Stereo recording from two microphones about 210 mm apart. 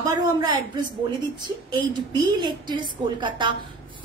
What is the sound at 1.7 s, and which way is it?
A woman's voice, 20° right (ahead or behind).